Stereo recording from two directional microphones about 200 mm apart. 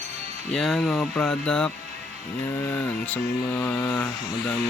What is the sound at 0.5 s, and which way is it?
Music, centre (ahead or behind).